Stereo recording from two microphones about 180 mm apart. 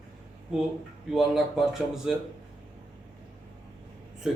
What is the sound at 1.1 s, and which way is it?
Speech, centre (ahead or behind).